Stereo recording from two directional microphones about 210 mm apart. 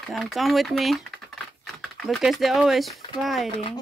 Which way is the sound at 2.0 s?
Centre (ahead or behind).